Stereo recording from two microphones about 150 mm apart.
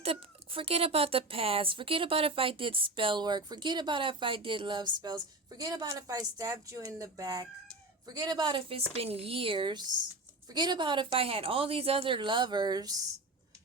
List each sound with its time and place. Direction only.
0.0 s speech: 40° right (ahead or behind)